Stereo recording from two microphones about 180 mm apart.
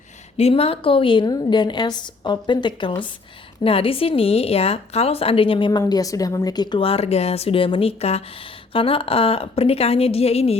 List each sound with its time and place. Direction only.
0.3 s a woman's voice: 35° left (ahead or behind)